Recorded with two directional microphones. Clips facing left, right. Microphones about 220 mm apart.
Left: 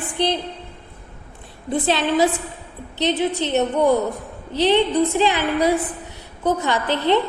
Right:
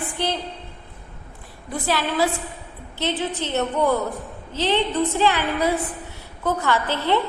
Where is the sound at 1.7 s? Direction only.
20° left (ahead or behind).